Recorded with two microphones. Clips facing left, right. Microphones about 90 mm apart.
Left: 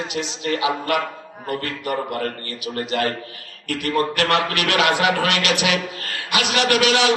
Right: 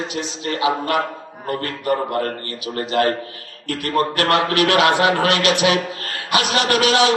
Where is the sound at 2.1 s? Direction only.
30° right (ahead or behind).